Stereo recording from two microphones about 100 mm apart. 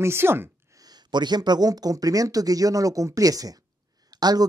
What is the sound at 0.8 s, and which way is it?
Speech, 45° right (ahead or behind).